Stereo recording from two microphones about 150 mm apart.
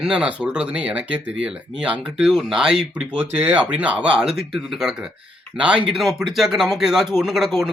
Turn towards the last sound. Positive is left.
turn(degrees=0)  # may be behind; listen again after turning